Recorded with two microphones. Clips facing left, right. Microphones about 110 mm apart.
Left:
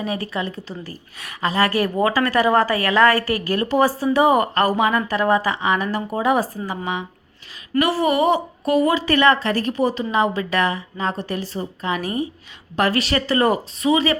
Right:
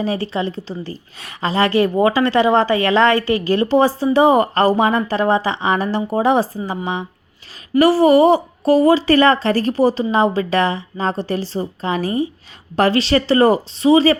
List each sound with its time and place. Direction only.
0.0 s a woman's voice: 30° right (ahead or behind)